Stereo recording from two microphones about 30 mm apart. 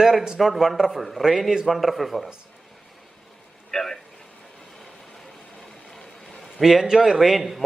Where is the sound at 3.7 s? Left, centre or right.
Centre.